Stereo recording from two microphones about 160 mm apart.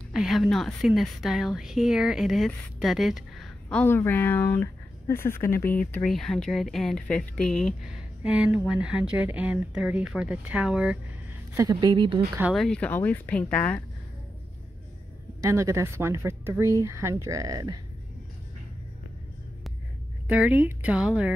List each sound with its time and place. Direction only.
0.1 s speech: centre (ahead or behind)
3.6 s speech: 15° left (ahead or behind)
5.6 s speech: 60° left (ahead or behind)
5.9 s speech: 5° left (ahead or behind)
11.5 s a woman's voice: 25° right (ahead or behind)
12.5 s speech: 5° left (ahead or behind)
15.4 s speech: 20° right (ahead or behind)
20.2 s speech: 10° right (ahead or behind)